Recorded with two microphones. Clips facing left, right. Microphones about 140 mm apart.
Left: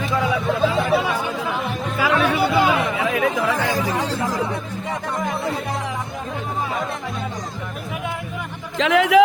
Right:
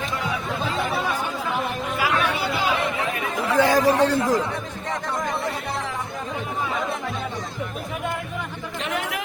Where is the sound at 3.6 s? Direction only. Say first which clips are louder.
Right 5 dB; 90° right; by 4.2 s 70° right (ahead or behind).